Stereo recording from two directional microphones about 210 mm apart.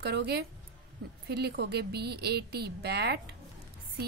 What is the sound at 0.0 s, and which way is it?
A woman's voice, 50° right (ahead or behind).